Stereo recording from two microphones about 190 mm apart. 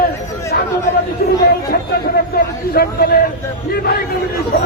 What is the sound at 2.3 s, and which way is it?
Speech, 55° left (ahead or behind).